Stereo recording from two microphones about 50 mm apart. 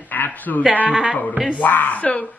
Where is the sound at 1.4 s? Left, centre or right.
Left.